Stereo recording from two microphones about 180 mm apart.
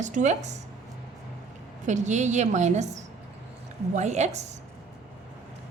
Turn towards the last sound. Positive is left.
turn(degrees=-40)  # may be behind; listen again after turning